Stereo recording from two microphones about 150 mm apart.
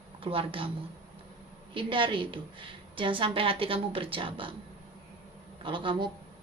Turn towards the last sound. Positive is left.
turn(degrees=-35)  # may be behind; listen again after turning